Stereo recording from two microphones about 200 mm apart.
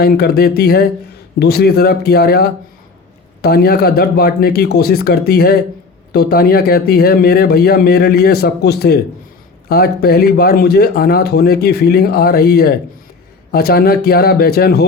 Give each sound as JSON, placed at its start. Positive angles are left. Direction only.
{"t": 0.0, "sound": "speech", "side_deg": 50}